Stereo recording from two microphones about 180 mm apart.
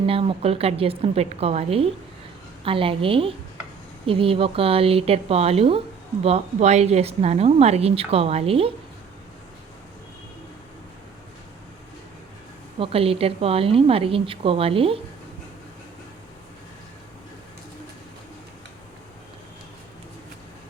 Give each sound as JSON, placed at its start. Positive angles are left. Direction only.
{"t": 0.0, "sound": "a woman's voice", "side_deg": -30}
{"t": 12.8, "sound": "a woman's voice", "side_deg": -30}